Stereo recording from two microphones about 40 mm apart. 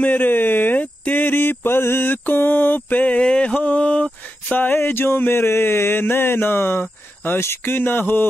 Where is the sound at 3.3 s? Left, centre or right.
Left.